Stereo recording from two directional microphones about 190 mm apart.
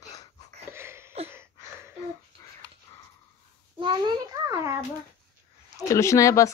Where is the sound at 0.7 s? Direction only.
15° right (ahead or behind).